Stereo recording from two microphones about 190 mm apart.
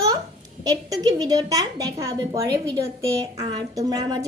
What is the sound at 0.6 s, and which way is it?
A woman's voice, 20° right (ahead or behind).